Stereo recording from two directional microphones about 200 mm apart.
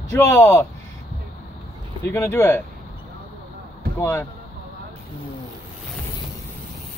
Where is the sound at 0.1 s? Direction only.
15° left (ahead or behind).